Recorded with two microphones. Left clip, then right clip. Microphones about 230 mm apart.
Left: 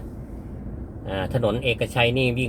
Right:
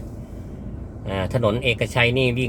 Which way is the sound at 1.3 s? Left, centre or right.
Centre.